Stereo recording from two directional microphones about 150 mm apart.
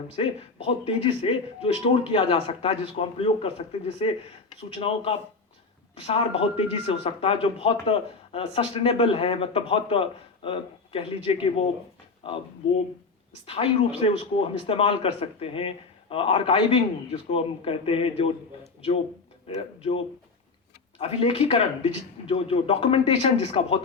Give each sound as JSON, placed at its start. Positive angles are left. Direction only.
{"t": 0.2, "sound": "speech", "side_deg": 35}
{"t": 13.4, "sound": "speech", "side_deg": 40}
{"t": 19.5, "sound": "speech", "side_deg": 35}